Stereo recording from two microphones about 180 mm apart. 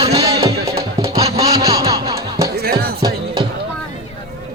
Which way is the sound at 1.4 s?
20° right (ahead or behind).